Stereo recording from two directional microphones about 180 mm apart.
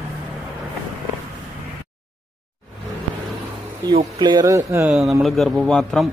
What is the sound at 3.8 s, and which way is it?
Speech, 25° right (ahead or behind).